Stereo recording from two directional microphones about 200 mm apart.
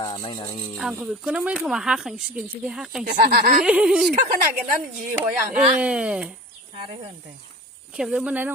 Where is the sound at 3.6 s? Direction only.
5° right (ahead or behind).